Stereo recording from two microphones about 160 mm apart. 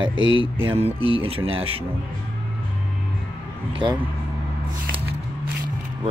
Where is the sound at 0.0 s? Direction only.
35° right (ahead or behind).